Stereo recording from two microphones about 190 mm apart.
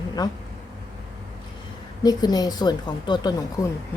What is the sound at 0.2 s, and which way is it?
Speech, 20° left (ahead or behind).